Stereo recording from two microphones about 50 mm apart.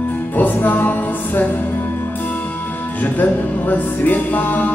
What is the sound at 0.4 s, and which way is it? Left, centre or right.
Music, left.